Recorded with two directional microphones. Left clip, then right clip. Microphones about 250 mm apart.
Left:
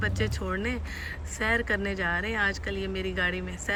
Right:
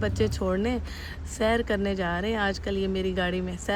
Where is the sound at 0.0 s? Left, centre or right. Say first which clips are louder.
Right 4 dB; centre.